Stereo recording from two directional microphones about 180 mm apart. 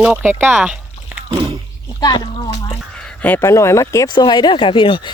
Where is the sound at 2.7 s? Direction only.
5° left (ahead or behind); by 5.0 s 25° left (ahead or behind).